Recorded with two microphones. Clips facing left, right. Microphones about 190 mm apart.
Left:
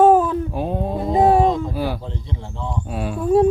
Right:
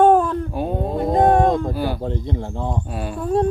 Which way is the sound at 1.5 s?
50° right (ahead or behind).